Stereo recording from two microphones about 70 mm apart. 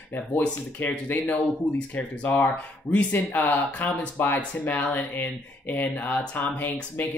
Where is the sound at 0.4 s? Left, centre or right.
Left.